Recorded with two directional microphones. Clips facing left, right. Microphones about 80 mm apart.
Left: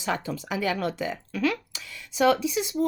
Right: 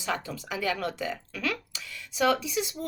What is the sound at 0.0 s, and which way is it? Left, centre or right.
Speech, left.